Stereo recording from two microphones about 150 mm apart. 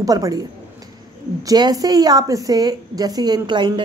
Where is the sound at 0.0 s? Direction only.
25° right (ahead or behind).